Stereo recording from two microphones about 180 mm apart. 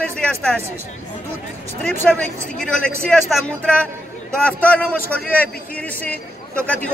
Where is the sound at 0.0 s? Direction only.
5° left (ahead or behind).